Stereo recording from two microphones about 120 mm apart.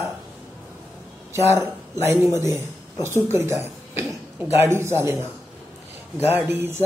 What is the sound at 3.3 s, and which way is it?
Male singing, 20° right (ahead or behind).